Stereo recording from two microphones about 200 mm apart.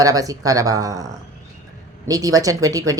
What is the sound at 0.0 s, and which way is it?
Speech, 15° right (ahead or behind).